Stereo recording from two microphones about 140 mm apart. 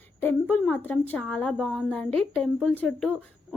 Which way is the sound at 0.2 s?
15° left (ahead or behind).